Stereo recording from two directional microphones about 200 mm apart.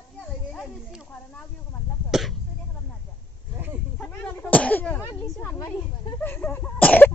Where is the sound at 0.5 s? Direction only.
Centre (ahead or behind).